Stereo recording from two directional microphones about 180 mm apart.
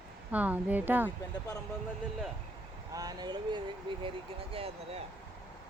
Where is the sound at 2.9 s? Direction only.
20° right (ahead or behind).